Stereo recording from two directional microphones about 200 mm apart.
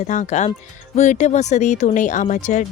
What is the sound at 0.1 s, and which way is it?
A woman's voice, 35° left (ahead or behind).